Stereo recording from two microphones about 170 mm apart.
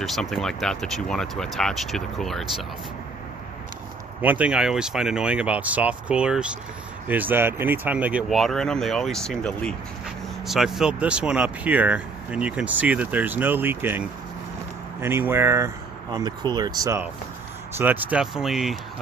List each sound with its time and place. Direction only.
0.0 s speech: centre (ahead or behind)
4.2 s speech: 10° right (ahead or behind)
17.7 s speech: 10° right (ahead or behind)